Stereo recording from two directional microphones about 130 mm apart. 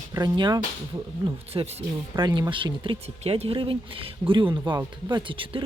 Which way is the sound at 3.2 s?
50° right (ahead or behind).